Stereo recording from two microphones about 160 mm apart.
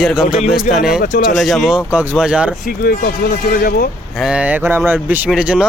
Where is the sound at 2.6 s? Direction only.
70° left (ahead or behind).